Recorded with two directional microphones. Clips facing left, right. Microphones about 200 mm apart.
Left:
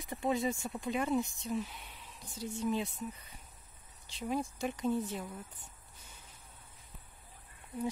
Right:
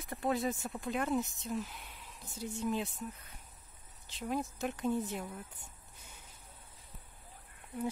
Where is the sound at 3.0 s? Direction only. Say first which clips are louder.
Left 2 dB; 5° left (ahead or behind); by 5.6 s 10° right (ahead or behind).